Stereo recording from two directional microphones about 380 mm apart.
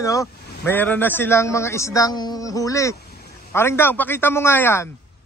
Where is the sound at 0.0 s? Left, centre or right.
Centre.